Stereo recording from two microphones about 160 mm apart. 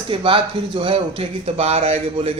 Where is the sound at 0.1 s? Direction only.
35° right (ahead or behind).